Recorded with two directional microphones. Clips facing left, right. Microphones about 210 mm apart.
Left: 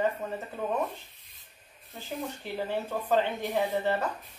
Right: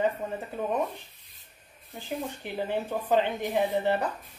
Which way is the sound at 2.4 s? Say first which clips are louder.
Right 1 dB; 15° right (ahead or behind).